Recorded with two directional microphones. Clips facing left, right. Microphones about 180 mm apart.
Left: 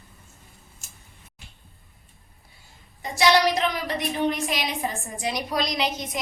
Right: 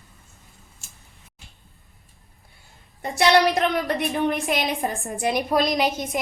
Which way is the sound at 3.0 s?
55° right (ahead or behind).